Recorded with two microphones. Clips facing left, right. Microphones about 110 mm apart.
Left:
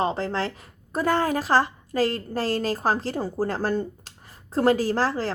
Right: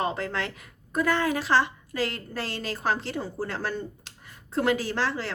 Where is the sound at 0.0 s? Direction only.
30° left (ahead or behind).